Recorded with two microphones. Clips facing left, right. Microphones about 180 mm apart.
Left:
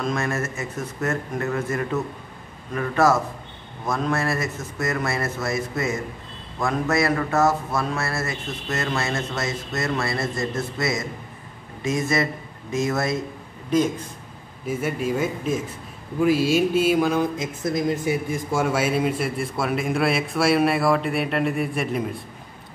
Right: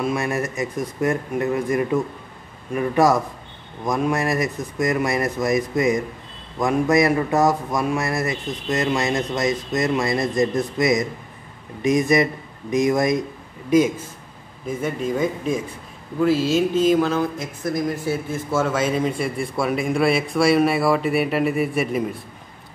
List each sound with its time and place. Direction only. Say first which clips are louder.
0.0 s speech: right 2 dB; 10° right (ahead or behind)
14.7 s speech: right 1 dB; 5° left (ahead or behind)